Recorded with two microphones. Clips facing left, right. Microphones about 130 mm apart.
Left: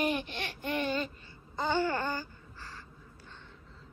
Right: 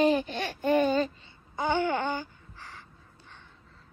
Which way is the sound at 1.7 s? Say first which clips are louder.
Right 2 dB; 20° right (ahead or behind).